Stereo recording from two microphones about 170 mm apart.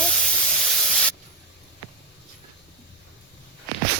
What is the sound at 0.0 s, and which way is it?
Spray, 5° left (ahead or behind).